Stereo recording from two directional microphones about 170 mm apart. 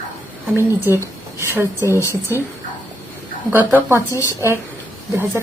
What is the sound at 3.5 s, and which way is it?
Speech, 10° right (ahead or behind).